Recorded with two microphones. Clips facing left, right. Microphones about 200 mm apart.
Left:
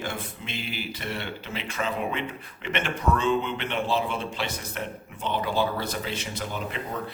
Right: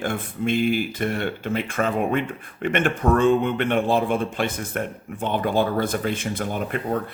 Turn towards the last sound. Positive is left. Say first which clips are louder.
# right 7 dB
turn(degrees=-50)  # may be behind; listen again after turning